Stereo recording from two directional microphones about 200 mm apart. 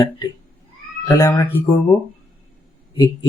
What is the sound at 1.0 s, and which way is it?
Speech, 15° left (ahead or behind).